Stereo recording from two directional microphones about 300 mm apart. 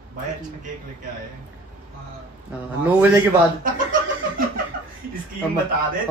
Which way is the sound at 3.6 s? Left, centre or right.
Right.